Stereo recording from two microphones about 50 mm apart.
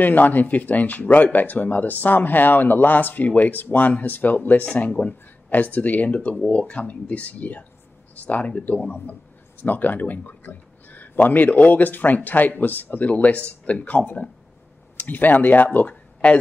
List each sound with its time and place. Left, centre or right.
0.0 s speech: left